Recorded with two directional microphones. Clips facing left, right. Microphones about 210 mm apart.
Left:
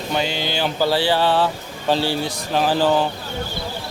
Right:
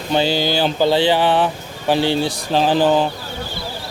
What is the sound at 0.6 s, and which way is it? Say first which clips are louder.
Speech: right 2 dB; 20° right (ahead or behind).